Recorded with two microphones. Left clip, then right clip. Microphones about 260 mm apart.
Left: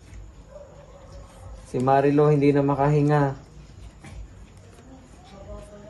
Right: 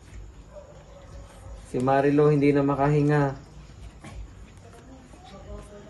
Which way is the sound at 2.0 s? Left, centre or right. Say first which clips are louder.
Left 1 dB; centre.